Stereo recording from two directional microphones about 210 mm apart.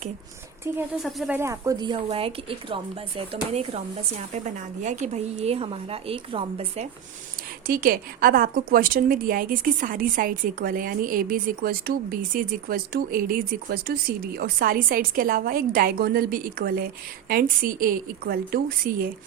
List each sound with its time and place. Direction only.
1.0 s speech: centre (ahead or behind)
1.4 s speech: 15° right (ahead or behind)
7.7 s a woman's voice: 45° right (ahead or behind)